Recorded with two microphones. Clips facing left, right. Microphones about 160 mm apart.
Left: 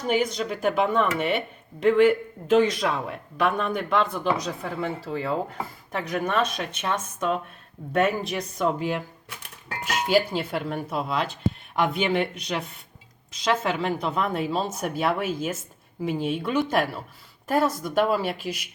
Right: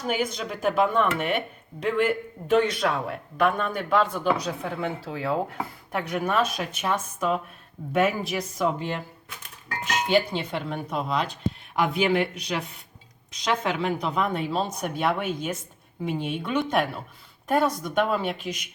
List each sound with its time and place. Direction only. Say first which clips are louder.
0.1 s speech: left 4 dB; centre (ahead or behind)